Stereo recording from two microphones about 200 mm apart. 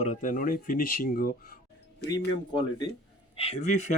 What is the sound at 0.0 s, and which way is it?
Speech, 40° left (ahead or behind).